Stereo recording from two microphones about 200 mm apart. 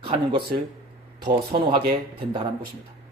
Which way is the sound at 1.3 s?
25° right (ahead or behind).